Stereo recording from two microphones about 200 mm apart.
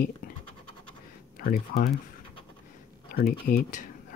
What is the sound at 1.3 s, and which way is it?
Speech, 45° left (ahead or behind).